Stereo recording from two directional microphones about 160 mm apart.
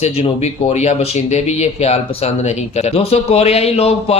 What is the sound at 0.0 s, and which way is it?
Speech, 40° left (ahead or behind).